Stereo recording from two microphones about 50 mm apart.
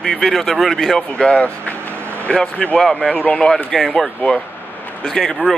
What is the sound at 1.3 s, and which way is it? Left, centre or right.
Speech, left.